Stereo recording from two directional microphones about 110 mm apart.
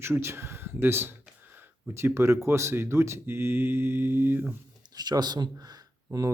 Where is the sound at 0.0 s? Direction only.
25° right (ahead or behind).